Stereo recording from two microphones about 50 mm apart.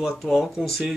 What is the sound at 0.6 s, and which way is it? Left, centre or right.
Speech, centre.